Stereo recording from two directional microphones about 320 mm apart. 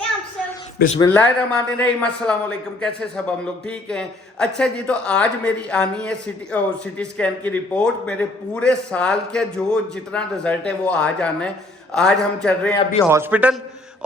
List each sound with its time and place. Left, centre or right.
0.9 s a man's voice: centre